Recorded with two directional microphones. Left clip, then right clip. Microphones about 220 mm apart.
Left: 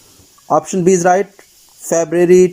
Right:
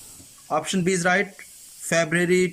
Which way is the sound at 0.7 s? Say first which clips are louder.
Left 10 dB; 5° left (ahead or behind).